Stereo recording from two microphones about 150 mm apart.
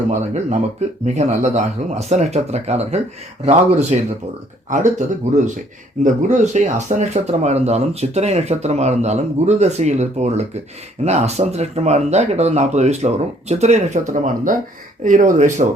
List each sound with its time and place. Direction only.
0.1 s speech: 50° right (ahead or behind)